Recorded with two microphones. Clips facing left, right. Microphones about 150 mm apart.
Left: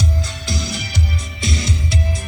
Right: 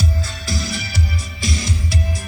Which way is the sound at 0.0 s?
20° left (ahead or behind).